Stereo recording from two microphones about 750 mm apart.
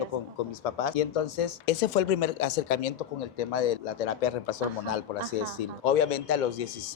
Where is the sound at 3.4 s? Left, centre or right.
Left.